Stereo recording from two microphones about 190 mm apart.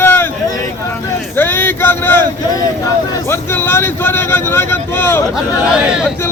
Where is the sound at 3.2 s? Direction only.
15° left (ahead or behind).